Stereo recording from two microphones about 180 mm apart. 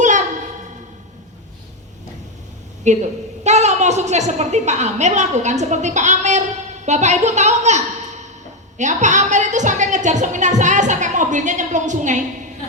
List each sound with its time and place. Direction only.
0.0 s a sound: 40° right (ahead or behind)
2.8 s a woman's voice: 40° right (ahead or behind)
8.8 s a woman's voice: 40° right (ahead or behind)